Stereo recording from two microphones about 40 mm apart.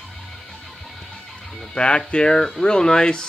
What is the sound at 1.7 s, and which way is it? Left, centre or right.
Speech, left.